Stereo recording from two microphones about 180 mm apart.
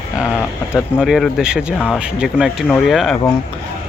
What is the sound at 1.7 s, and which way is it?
Speech, 10° left (ahead or behind).